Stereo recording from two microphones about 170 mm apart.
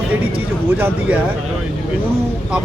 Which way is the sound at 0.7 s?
10° right (ahead or behind).